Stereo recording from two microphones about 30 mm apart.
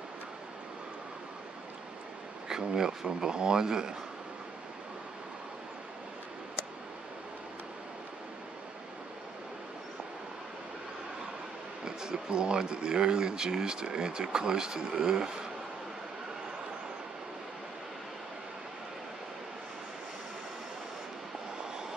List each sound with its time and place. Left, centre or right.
2.5 s speech: right
11.8 s speech: right